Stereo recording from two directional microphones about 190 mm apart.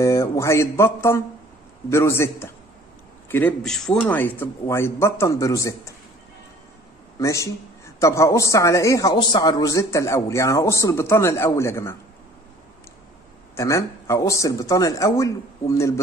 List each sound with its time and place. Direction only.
0.0 s a man's voice: 15° left (ahead or behind)
7.2 s a man's voice: 15° left (ahead or behind)
13.6 s a man's voice: 15° left (ahead or behind)